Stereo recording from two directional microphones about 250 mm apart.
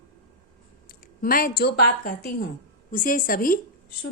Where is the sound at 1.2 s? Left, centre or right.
Left.